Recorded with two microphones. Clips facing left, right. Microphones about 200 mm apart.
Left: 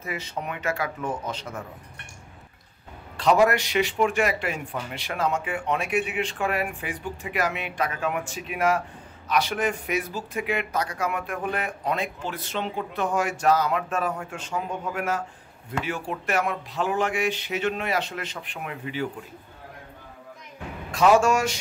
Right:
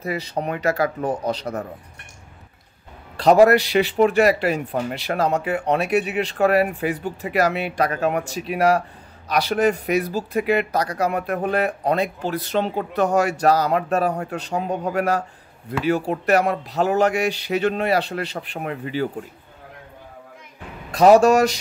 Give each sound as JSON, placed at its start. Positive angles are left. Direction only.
{"t": 0.0, "sound": "speech", "side_deg": -35}
{"t": 3.2, "sound": "speech", "side_deg": -35}
{"t": 20.9, "sound": "speech", "side_deg": -35}